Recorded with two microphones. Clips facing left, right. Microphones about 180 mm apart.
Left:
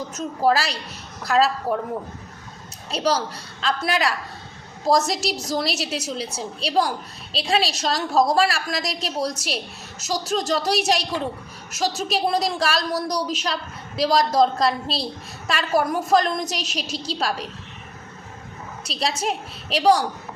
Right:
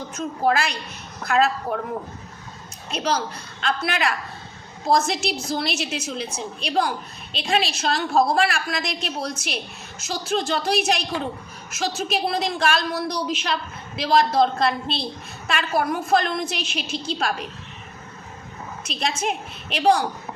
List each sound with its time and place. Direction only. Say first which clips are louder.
0.1 s a woman's voice: left 1 dB; 35° left (ahead or behind)
2.9 s a woman's voice: left 2 dB; 35° left (ahead or behind)
18.9 s a woman's voice: left 1 dB; 35° left (ahead or behind)